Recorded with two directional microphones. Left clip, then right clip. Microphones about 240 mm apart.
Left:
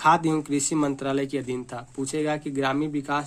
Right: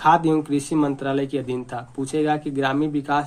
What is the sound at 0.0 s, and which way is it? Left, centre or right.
Speech, left.